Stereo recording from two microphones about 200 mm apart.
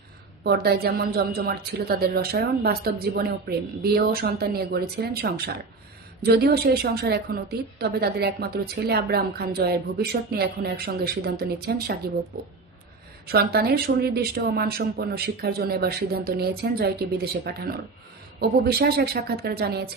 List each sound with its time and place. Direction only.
0.4 s a woman's voice: 55° right (ahead or behind)
13.2 s a woman's voice: 50° right (ahead or behind)